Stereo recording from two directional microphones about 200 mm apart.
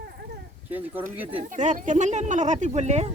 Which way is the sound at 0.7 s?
10° right (ahead or behind).